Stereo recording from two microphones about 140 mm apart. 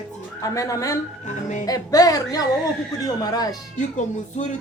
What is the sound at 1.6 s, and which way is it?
Speech, 25° left (ahead or behind).